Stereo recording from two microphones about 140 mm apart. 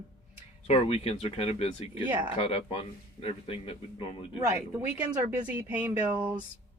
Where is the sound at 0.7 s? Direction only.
45° left (ahead or behind).